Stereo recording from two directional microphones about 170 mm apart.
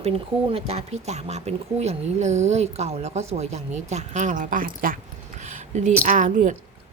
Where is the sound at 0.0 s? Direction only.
35° right (ahead or behind); by 4.9 s 55° right (ahead or behind).